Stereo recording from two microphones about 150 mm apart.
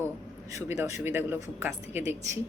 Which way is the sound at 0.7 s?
20° right (ahead or behind).